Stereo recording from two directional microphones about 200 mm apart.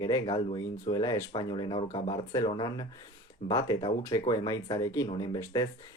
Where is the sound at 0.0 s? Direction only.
20° left (ahead or behind).